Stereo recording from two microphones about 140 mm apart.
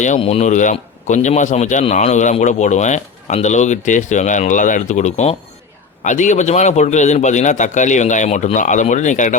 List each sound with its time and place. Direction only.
0.2 s speech: 50° left (ahead or behind)